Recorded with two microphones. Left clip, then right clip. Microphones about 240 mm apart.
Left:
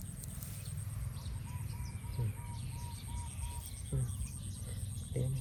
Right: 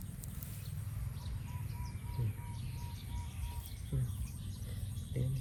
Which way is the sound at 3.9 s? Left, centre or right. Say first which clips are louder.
Left 1 dB; left.